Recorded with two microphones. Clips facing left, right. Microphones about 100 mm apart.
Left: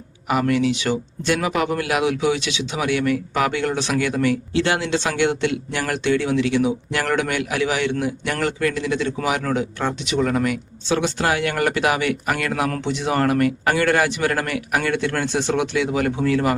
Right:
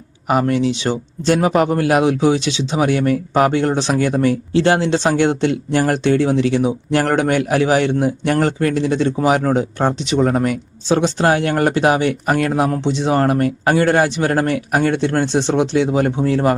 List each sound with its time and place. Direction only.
0.3 s speech: 35° right (ahead or behind)